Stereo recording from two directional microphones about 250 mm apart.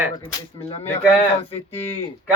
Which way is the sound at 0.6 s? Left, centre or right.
Left.